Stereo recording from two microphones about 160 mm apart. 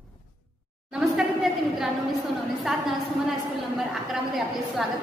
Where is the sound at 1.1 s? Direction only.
Centre (ahead or behind).